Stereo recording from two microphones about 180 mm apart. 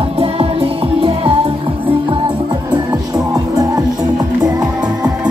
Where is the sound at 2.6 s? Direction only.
20° right (ahead or behind).